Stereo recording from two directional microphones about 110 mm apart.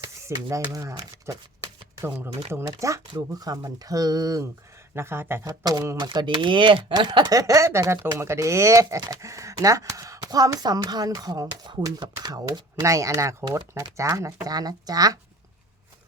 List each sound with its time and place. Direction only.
0.0 s a sound: 25° right (ahead or behind)
0.4 s speech: 30° right (ahead or behind)
1.1 s shuffling cards: 30° right (ahead or behind)
2.5 s speech: 25° right (ahead or behind)
4.9 s speech: 20° right (ahead or behind)
5.5 s speech: 35° right (ahead or behind)